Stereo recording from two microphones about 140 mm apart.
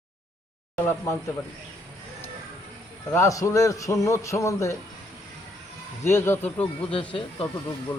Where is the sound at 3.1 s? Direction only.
20° left (ahead or behind).